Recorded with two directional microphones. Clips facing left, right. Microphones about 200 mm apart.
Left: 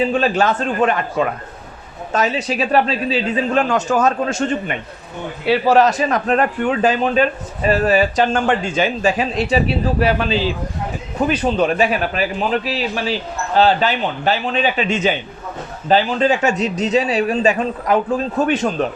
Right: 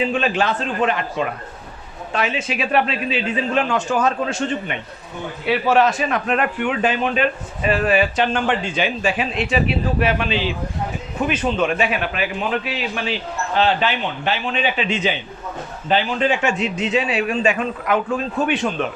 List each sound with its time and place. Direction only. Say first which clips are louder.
0.0 s a man's voice: left 3 dB; 40° left (ahead or behind)